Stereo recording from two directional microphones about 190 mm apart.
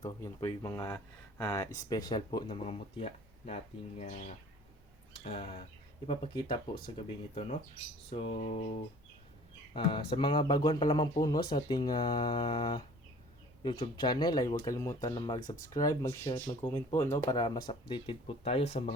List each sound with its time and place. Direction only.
0.0 s speech: 20° left (ahead or behind)
5.2 s speech: 30° left (ahead or behind)
8.1 s music: 30° left (ahead or behind)
9.7 s speech: 25° left (ahead or behind)